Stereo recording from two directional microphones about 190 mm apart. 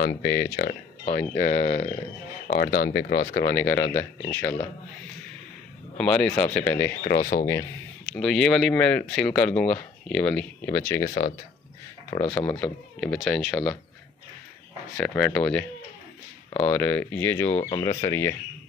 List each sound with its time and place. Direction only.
0.0 s speech: 55° left (ahead or behind); by 2.0 s 30° left (ahead or behind)
2.4 s speech: 50° left (ahead or behind)
4.2 s speech: 10° left (ahead or behind)
5.9 s speech: 5° left (ahead or behind)
7.1 s speech: 50° left (ahead or behind)
8.0 s speech: centre (ahead or behind)
12.2 s speech: 25° left (ahead or behind)
13.0 s speech: centre (ahead or behind)
15.0 s speech: 5° left (ahead or behind)
17.5 s speech: 30° left (ahead or behind)
17.8 s speech: 15° left (ahead or behind)